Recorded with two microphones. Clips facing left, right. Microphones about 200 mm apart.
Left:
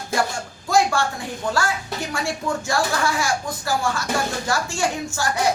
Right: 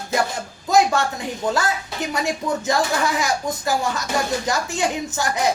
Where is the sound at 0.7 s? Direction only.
20° right (ahead or behind).